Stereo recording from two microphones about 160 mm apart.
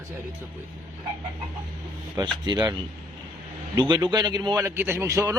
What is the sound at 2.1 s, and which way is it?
Speech, 25° right (ahead or behind).